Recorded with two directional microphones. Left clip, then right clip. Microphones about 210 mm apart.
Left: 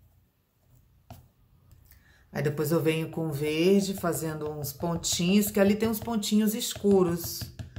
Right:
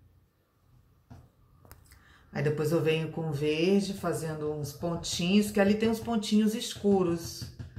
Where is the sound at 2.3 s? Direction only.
20° left (ahead or behind).